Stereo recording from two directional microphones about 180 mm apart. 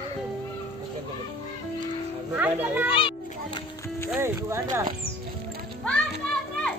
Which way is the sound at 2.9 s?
30° left (ahead or behind).